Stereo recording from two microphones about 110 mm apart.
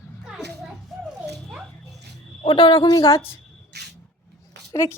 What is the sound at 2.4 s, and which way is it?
Speech, 45° left (ahead or behind).